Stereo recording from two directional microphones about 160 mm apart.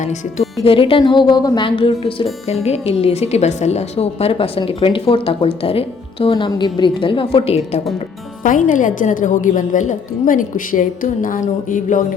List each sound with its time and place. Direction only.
0.0 s speech: 45° left (ahead or behind)
0.6 s a woman's voice: 35° left (ahead or behind)
8.4 s a woman's voice: 55° left (ahead or behind)